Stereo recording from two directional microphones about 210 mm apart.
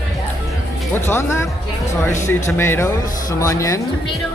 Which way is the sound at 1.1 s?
10° left (ahead or behind).